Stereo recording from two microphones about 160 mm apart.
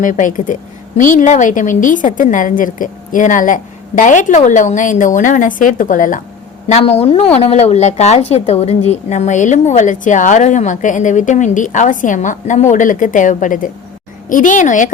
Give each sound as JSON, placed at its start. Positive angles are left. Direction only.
{"t": 0.0, "sound": "a woman's voice", "side_deg": 55}
{"t": 6.7, "sound": "a woman's voice", "side_deg": 40}